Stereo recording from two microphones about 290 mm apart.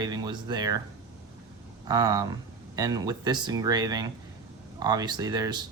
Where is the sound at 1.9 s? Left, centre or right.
Centre.